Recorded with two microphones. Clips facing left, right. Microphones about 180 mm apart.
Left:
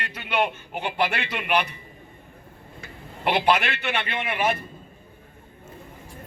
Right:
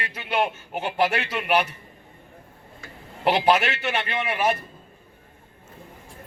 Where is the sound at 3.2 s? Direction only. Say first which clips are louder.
Right 2 dB; 40° right (ahead or behind).